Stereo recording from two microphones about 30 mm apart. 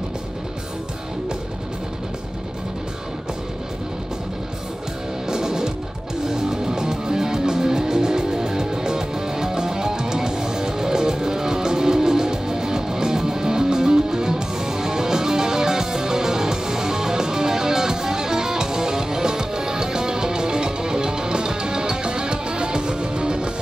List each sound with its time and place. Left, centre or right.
5.3 s music: right